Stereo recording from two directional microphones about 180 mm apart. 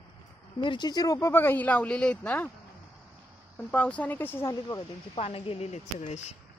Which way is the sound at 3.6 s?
5° left (ahead or behind).